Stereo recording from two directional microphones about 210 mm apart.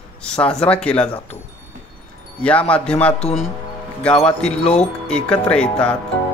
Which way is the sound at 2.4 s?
5° left (ahead or behind).